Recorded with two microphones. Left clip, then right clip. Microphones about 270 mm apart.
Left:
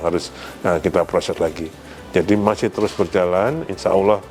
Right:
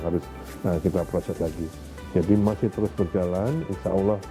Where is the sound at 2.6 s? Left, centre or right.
Centre.